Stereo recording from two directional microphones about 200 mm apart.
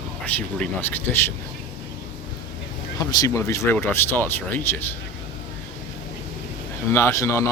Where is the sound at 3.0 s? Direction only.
20° left (ahead or behind).